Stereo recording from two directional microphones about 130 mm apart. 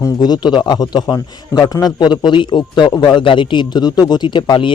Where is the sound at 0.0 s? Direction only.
30° left (ahead or behind).